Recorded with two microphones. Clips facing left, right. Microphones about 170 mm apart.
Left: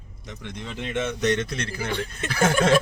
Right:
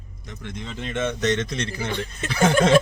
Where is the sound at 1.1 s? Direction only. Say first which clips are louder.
Even; 10° left (ahead or behind).